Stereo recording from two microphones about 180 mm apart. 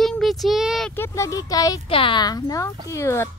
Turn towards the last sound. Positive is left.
turn(degrees=15)  # may be behind; listen again after turning